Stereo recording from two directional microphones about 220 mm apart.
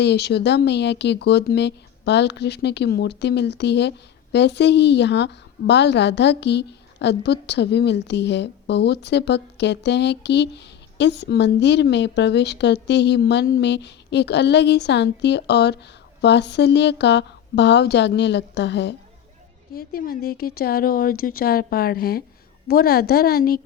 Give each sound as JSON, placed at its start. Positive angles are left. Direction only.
{"t": 0.0, "sound": "speech", "side_deg": 50}